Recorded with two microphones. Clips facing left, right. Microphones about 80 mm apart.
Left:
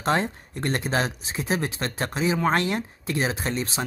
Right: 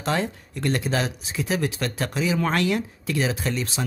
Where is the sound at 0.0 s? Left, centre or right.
Left.